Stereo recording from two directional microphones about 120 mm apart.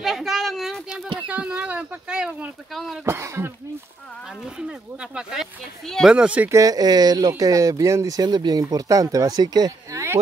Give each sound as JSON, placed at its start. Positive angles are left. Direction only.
{"t": 0.0, "sound": "a sound", "side_deg": 0}
{"t": 1.3, "sound": "speech", "side_deg": -10}
{"t": 3.1, "sound": "speech", "side_deg": -20}
{"t": 4.6, "sound": "speech", "side_deg": -5}
{"t": 6.1, "sound": "speech", "side_deg": -10}
{"t": 6.5, "sound": "speech", "side_deg": -30}